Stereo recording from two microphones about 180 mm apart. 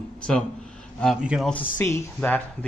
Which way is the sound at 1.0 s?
Centre (ahead or behind).